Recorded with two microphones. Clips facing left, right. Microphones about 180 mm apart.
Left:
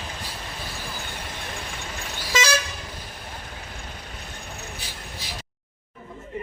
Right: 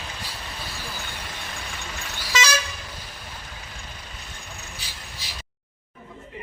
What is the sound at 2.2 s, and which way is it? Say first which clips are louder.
Vehicle: left 1 dB; 50° left (ahead or behind).